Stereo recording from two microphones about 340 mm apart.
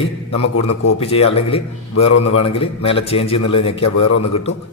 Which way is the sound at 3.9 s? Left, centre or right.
Left.